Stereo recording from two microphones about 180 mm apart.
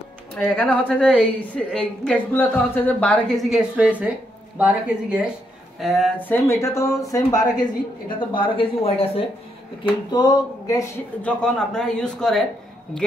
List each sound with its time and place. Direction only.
0.4 s a woman's voice: 10° left (ahead or behind); by 9.2 s 30° left (ahead or behind)
10.1 s speech: 20° left (ahead or behind)
11.2 s a woman's voice: 5° left (ahead or behind)